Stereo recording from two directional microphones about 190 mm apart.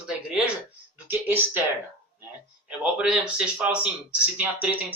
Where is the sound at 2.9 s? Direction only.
5° right (ahead or behind).